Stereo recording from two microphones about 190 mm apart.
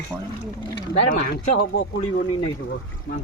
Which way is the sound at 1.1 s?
50° left (ahead or behind).